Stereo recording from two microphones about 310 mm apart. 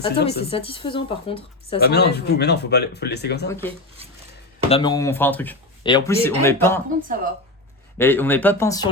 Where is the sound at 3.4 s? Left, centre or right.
Centre.